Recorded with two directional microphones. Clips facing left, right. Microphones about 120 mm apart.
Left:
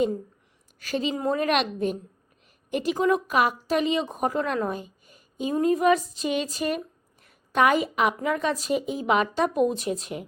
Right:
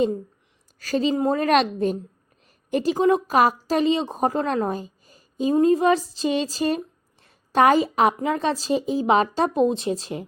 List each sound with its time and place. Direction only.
0.8 s a woman's voice: 35° right (ahead or behind)